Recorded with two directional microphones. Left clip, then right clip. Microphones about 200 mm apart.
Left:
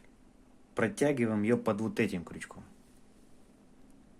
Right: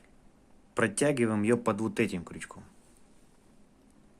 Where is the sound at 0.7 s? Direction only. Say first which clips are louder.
Right 2 dB; 20° right (ahead or behind).